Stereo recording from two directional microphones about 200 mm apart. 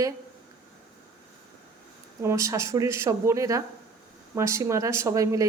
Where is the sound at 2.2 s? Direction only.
15° right (ahead or behind).